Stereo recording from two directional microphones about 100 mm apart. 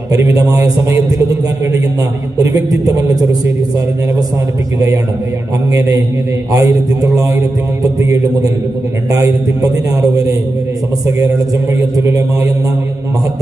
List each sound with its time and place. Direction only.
0.1 s a man's voice: 35° right (ahead or behind)
2.4 s a man's voice: 35° right (ahead or behind)
6.5 s a man's voice: 35° right (ahead or behind)
9.1 s a man's voice: 35° right (ahead or behind)